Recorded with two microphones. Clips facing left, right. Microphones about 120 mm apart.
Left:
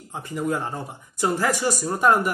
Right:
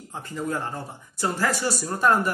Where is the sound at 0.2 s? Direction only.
15° left (ahead or behind).